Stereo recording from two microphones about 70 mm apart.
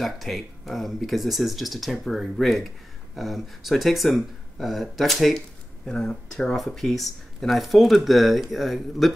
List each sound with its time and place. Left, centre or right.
0.0 s speech: centre